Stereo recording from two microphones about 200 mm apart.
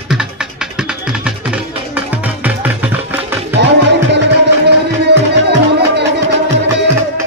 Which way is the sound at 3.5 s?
60° right (ahead or behind).